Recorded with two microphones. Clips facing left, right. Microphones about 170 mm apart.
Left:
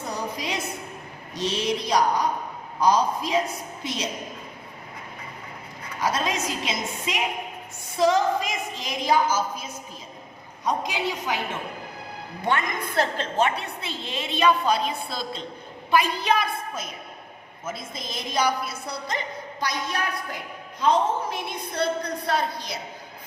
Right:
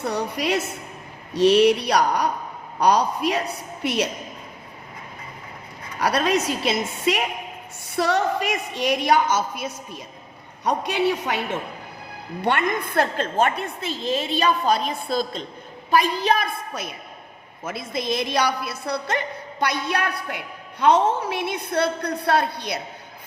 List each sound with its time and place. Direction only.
0.0 s a sound: 70° right (ahead or behind)
1.3 s a woman's voice: 70° right (ahead or behind)
6.0 s a woman's voice: 70° right (ahead or behind)
10.6 s a man's voice: 65° right (ahead or behind)
12.5 s a woman's voice: 65° right (ahead or behind); by 16.5 s 40° right (ahead or behind)
17.6 s a woman's voice: 70° right (ahead or behind)